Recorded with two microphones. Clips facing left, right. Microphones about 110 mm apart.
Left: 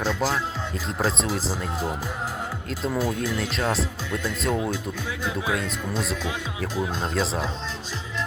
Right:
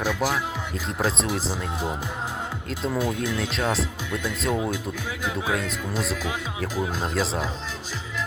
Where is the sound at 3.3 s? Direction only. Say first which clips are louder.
Even; centre (ahead or behind).